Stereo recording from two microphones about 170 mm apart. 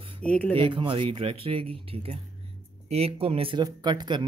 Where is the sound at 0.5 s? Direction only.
30° right (ahead or behind).